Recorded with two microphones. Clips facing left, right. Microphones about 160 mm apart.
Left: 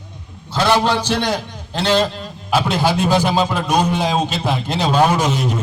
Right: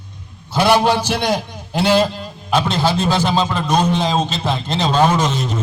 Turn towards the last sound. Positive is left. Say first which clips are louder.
# even
turn(degrees=10)  # may be behind; listen again after turning